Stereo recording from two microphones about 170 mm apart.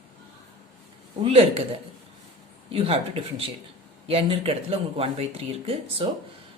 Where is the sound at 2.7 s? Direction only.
35° right (ahead or behind).